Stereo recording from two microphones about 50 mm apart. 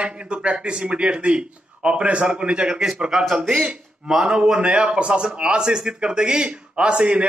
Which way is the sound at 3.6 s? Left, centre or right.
Centre.